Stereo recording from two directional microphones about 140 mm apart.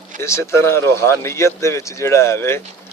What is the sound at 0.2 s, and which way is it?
Speech, 20° left (ahead or behind).